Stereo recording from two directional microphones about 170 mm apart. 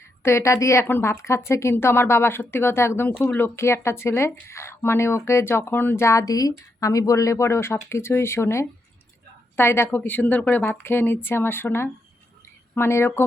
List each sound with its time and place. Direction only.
0.2 s speech: 15° left (ahead or behind)